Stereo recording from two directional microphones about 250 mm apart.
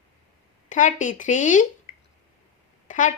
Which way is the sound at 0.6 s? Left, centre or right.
Left.